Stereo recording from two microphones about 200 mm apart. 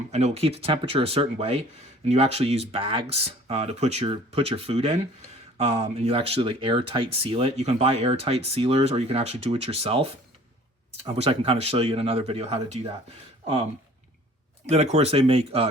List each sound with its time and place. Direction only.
0.1 s speech: 35° right (ahead or behind)
14.7 s speech: 30° right (ahead or behind)